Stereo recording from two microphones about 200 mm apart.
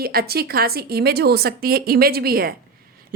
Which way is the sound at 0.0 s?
50° right (ahead or behind).